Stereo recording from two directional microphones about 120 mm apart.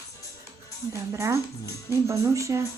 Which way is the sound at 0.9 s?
25° right (ahead or behind).